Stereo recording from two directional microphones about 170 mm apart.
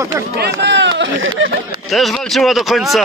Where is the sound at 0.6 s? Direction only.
90° right.